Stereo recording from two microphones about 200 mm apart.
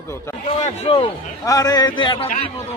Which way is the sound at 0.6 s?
30° left (ahead or behind).